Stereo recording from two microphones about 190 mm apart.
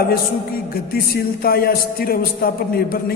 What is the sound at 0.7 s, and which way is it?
A man's voice, 55° left (ahead or behind).